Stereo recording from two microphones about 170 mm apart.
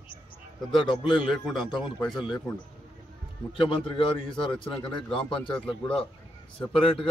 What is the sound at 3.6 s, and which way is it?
A man's voice, 30° left (ahead or behind).